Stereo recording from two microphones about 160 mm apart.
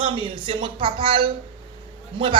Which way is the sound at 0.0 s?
30° right (ahead or behind).